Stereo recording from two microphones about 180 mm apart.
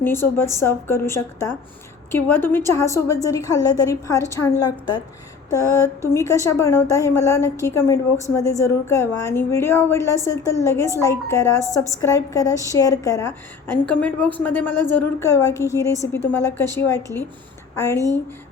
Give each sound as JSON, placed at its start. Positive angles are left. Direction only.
{"t": 0.0, "sound": "a woman's voice", "side_deg": 15}